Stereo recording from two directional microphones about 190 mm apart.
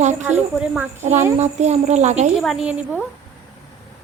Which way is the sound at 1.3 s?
35° right (ahead or behind).